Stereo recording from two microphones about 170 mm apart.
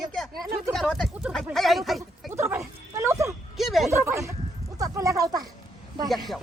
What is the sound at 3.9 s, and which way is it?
Speech, 15° right (ahead or behind).